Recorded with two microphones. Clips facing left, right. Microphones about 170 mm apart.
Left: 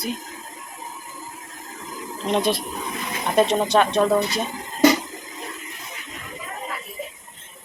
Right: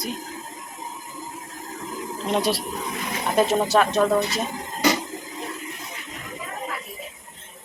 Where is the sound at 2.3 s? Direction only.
5° right (ahead or behind).